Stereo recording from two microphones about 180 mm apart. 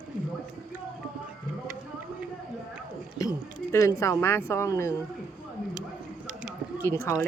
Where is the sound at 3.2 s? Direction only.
20° left (ahead or behind).